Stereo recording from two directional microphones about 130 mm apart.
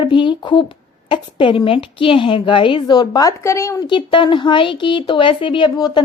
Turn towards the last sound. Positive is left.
turn(degrees=35)  # may be behind; listen again after turning